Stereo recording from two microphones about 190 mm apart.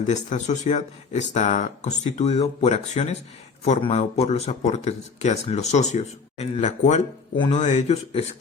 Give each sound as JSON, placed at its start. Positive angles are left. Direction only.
{"t": 0.1, "sound": "speech", "side_deg": 40}